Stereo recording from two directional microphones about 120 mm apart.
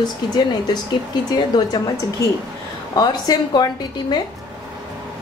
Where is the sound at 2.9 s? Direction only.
35° left (ahead or behind).